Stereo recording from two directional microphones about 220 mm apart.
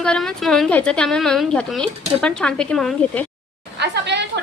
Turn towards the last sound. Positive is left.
turn(degrees=-50)  # may be behind; listen again after turning